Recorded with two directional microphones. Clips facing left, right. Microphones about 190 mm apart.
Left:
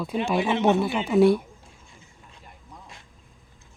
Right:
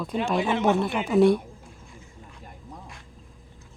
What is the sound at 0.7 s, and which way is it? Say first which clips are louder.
Speech: left 1 dB; 5° left (ahead or behind).